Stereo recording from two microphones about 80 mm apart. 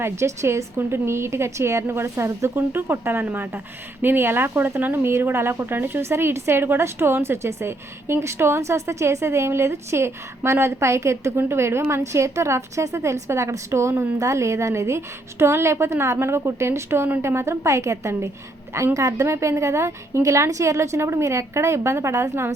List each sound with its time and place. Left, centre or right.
0.0 s a woman's voice: right
13.9 s a woman's voice: right
14.2 s a woman's voice: right